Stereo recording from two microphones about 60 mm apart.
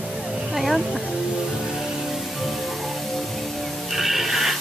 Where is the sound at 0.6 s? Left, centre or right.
Centre.